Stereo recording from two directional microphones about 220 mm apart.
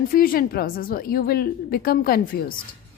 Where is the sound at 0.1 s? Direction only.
40° left (ahead or behind).